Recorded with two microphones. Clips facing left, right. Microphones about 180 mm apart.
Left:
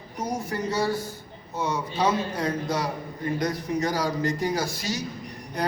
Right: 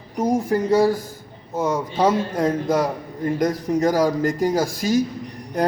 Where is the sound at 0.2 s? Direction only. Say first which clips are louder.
Right 9 dB; 50° right (ahead or behind).